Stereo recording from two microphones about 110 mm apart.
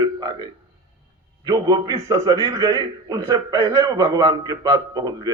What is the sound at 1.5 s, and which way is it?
A man's voice, 35° right (ahead or behind).